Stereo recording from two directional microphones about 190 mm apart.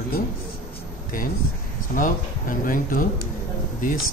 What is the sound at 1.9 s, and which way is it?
Speech, 45° left (ahead or behind).